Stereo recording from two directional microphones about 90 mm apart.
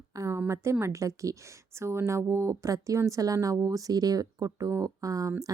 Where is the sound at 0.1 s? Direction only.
40° right (ahead or behind).